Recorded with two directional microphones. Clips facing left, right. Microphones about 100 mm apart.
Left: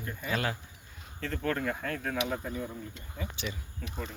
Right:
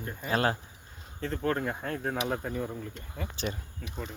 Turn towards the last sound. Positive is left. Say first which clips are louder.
# left 1 dB
turn(degrees=5)  # may be behind; listen again after turning